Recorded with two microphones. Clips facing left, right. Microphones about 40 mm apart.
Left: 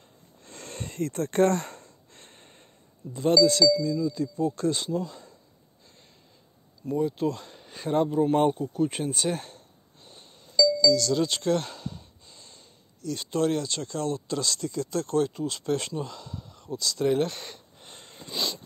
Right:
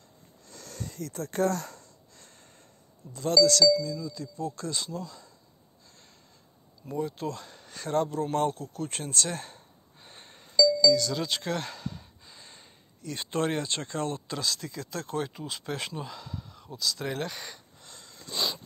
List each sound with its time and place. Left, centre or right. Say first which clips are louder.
0.4 s gasp: left 3 dB; left
3.1 s speech: left 2 dB; left
4.0 s speech: left 8 dB; left
6.9 s speech: left 6 dB; centre
9.9 s chink: right 1 dB; right
11.1 s a sound: left 6 dB; centre
12.4 s speech: right 1 dB; right
14.2 s speech: left 3 dB; centre
17.7 s a sound: left 3 dB; left